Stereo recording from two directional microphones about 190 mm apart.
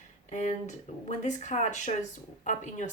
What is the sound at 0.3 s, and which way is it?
Speech, 35° left (ahead or behind).